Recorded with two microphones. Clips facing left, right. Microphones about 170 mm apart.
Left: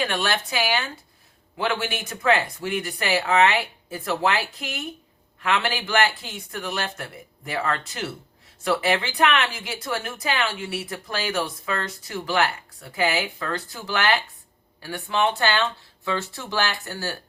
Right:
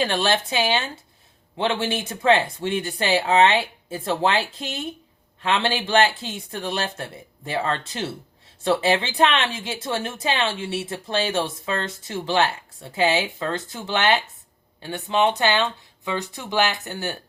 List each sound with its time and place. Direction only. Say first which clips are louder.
0.0 s a woman's voice: right 3 dB; 30° right (ahead or behind)